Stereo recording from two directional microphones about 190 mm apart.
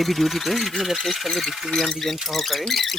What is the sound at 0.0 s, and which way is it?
Speech, centre (ahead or behind).